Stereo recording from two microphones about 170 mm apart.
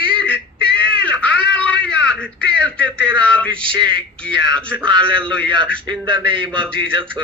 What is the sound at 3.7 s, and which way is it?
Speech, 30° right (ahead or behind).